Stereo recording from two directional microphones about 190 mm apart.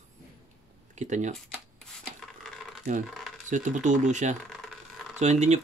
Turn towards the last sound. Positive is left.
turn(degrees=-35)  # may be behind; listen again after turning